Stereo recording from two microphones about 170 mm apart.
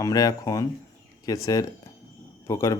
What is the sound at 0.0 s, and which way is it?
Speech, 20° left (ahead or behind).